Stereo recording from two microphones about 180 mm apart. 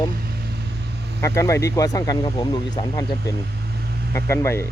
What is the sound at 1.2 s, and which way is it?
Speech, 15° left (ahead or behind).